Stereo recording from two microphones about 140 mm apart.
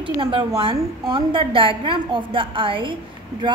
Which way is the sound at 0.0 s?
35° right (ahead or behind).